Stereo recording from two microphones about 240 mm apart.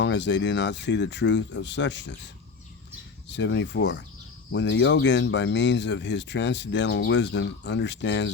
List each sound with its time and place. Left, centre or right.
0.0 s speech: left
3.2 s speech: left